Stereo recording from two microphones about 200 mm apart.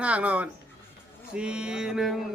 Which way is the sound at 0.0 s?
5° right (ahead or behind).